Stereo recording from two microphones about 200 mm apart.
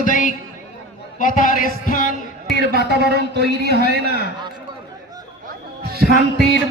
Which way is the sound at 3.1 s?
55° right (ahead or behind).